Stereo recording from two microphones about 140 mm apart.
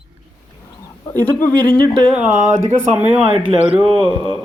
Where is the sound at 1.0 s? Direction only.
15° left (ahead or behind).